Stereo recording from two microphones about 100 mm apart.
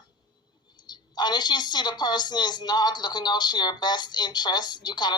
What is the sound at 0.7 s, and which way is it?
Speech, 45° left (ahead or behind).